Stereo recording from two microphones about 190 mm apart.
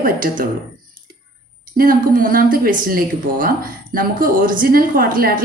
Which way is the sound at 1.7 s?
45° right (ahead or behind).